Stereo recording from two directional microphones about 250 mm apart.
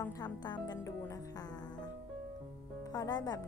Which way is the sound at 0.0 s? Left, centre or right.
Centre.